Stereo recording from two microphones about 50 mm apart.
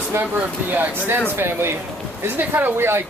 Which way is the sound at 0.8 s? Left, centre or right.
Right.